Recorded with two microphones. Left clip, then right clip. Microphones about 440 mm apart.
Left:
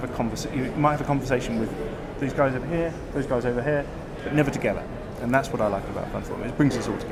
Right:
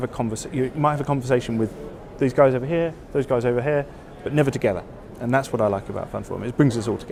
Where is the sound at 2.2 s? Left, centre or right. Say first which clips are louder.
Right 7 dB; right.